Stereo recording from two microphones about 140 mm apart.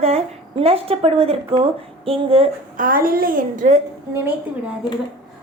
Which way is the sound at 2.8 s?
90° right.